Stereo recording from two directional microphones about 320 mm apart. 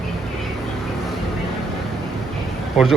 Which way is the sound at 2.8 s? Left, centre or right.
Centre.